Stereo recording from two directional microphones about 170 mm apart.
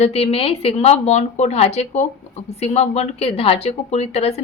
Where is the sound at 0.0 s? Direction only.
35° left (ahead or behind).